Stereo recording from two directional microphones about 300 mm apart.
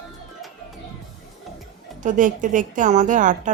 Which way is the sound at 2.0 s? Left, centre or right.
Right.